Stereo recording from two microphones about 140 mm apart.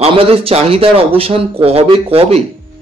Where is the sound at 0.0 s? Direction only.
40° right (ahead or behind).